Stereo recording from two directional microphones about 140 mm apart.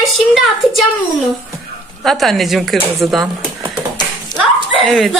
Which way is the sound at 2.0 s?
Centre (ahead or behind).